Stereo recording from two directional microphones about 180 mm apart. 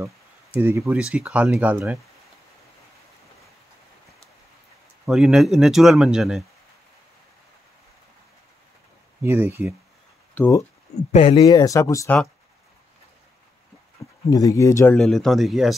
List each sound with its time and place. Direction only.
0.6 s speech: 15° right (ahead or behind)
5.0 s speech: centre (ahead or behind)
9.2 s speech: 15° right (ahead or behind)
10.4 s speech: 5° left (ahead or behind)
11.1 s speech: 30° left (ahead or behind)
14.0 s a sound: 15° left (ahead or behind)
14.3 s speech: 20° left (ahead or behind)
15.0 s speech: centre (ahead or behind)